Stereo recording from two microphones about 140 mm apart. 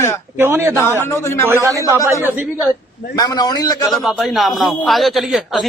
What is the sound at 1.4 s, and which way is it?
Speech, 20° right (ahead or behind).